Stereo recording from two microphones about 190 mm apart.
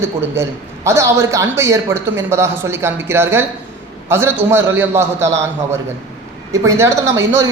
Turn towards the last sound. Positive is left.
turn(degrees=-15)  # may be behind; listen again after turning